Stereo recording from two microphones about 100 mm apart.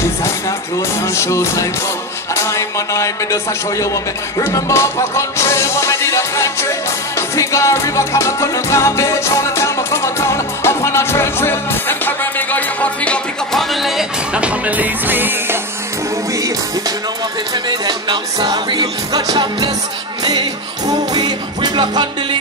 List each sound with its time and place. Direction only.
1.1 s music: 30° left (ahead or behind); by 15.3 s 20° right (ahead or behind)
17.6 s music: 50° right (ahead or behind)
21.1 s music: 40° right (ahead or behind)